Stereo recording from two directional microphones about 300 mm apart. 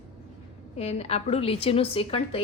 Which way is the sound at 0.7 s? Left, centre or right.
Left.